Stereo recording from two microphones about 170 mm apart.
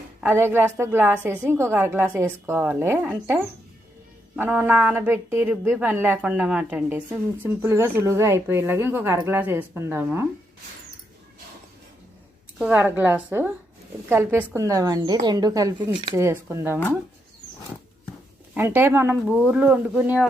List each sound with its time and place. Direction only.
0.2 s a woman's voice: 10° right (ahead or behind)
4.4 s a woman's voice: 10° right (ahead or behind)
12.5 s a woman's voice: 10° right (ahead or behind)
18.5 s a woman's voice: 10° right (ahead or behind)